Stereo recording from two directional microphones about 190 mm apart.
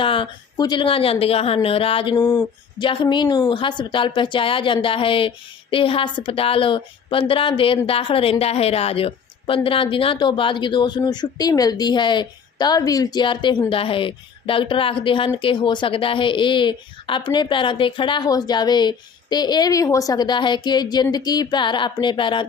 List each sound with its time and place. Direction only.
0.0 s a woman's voice: 25° left (ahead or behind)
2.2 s speech: 10° left (ahead or behind)
2.7 s a woman's voice: 25° left (ahead or behind)